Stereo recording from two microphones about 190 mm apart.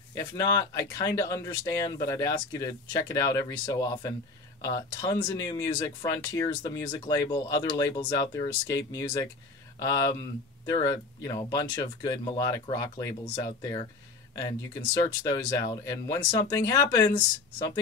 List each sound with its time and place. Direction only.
0.1 s speech: 20° left (ahead or behind)